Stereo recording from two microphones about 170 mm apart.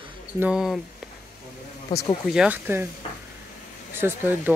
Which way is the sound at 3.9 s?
15° right (ahead or behind).